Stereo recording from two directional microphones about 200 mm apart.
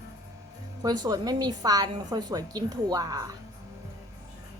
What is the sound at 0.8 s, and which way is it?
A woman's voice, 20° right (ahead or behind).